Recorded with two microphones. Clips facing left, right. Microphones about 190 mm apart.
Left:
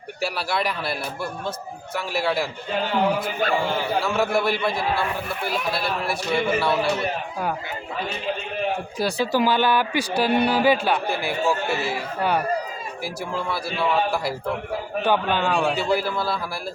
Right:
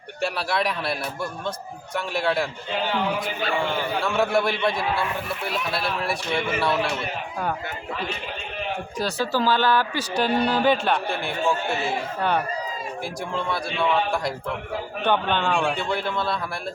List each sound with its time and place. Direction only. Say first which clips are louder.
0.2 s a man's voice: right 1 dB; centre (ahead or behind)
3.4 s a man's voice: left 5 dB; 45° left (ahead or behind)
4.0 s a man's voice: right 3 dB; centre (ahead or behind)
9.0 s a man's voice: left 2 dB; 10° left (ahead or behind)